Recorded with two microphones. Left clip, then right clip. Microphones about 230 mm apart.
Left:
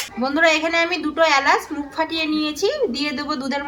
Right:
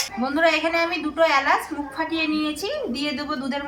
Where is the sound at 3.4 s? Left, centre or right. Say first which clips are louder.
Left 3 dB; left.